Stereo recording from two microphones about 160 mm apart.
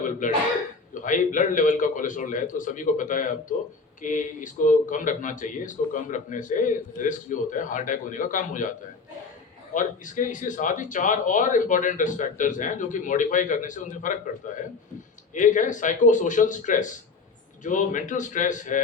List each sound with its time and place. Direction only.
0.2 s a man's voice: 55° left (ahead or behind)
9.7 s speech: 55° left (ahead or behind)